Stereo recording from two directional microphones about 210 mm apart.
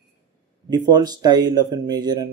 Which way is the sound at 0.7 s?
20° right (ahead or behind).